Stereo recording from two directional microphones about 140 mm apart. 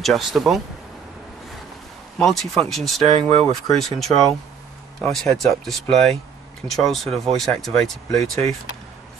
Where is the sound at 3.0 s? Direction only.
45° right (ahead or behind).